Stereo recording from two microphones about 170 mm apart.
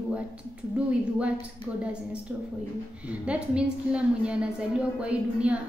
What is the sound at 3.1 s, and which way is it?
A woman's voice, 5° right (ahead or behind).